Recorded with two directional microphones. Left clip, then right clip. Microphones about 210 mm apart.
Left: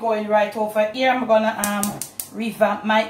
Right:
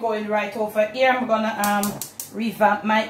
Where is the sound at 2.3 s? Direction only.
20° right (ahead or behind).